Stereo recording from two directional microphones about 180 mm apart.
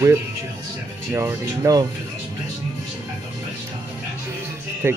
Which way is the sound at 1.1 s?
15° right (ahead or behind).